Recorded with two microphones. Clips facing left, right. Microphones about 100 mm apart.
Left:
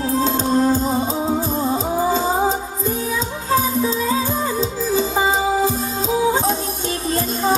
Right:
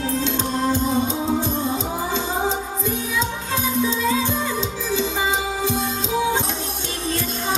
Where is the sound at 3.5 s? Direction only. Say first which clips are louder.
Left 3 dB; 40° left (ahead or behind).